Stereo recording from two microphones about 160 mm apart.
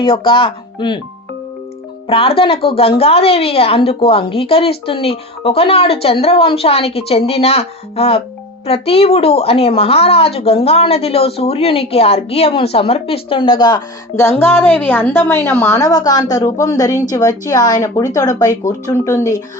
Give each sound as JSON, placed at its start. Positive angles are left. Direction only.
{"t": 0.0, "sound": "a woman's voice", "side_deg": 30}
{"t": 2.0, "sound": "a woman's voice", "side_deg": 35}